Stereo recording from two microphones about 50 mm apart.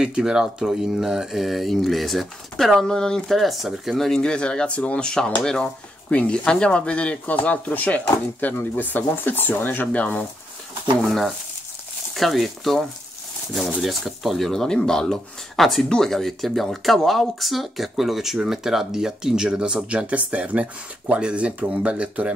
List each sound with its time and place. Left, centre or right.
0.0 s speech: centre
3.3 s speech: centre
6.0 s speech: left
11.0 s speech: centre
13.7 s speech: centre
20.1 s speech: right